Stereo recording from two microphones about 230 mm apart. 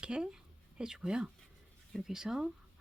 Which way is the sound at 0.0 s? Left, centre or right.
Centre.